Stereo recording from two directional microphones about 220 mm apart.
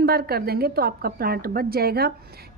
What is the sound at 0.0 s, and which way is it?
A woman's voice, 45° right (ahead or behind).